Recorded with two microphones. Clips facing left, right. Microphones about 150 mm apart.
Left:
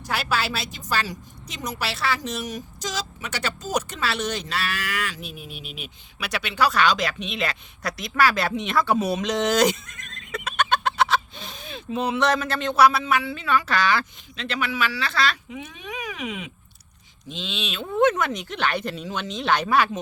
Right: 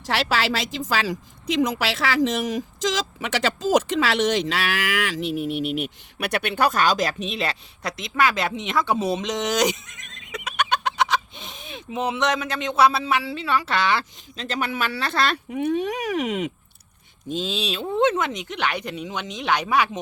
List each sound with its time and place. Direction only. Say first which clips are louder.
0.0 s a woman's voice: right 3 dB; 90° right; by 14.0 s 25° right (ahead or behind)
14.3 s speech: even; 40° right (ahead or behind); by 16.5 s 65° right (ahead or behind)
17.2 s speech: right 6 dB; 40° right (ahead or behind); by 20.0 s 15° right (ahead or behind)